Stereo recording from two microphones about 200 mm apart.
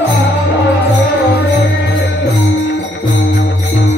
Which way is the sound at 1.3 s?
55° left (ahead or behind).